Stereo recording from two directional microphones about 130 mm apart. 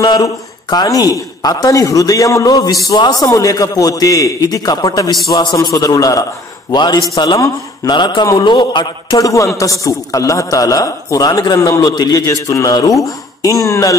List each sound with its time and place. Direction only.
0.0 s a man's voice: 30° left (ahead or behind)
7.9 s a man's voice: 35° left (ahead or behind)
9.3 s speech: 25° left (ahead or behind)